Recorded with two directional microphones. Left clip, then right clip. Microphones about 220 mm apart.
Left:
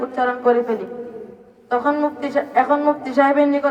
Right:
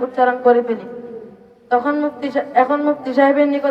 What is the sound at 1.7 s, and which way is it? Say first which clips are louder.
Brass instrument: right 2 dB; 15° left (ahead or behind).